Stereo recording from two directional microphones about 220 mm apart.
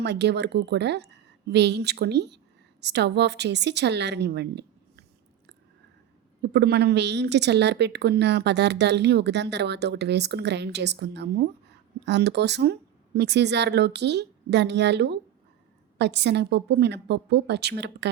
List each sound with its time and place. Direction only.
0.0 s speech: 50° right (ahead or behind)
6.5 s speech: 50° right (ahead or behind)